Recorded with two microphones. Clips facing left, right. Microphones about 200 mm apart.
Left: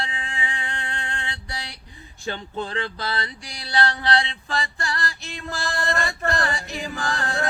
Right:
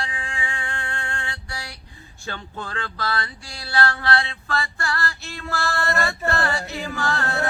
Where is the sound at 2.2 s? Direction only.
20° left (ahead or behind).